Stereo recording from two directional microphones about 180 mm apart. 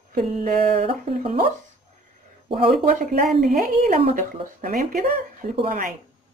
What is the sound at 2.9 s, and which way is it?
A woman's voice, 45° right (ahead or behind).